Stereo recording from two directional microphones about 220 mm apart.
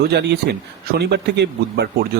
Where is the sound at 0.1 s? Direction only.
50° right (ahead or behind).